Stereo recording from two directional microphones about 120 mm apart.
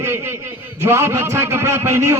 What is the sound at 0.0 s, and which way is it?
A man's voice, 20° right (ahead or behind).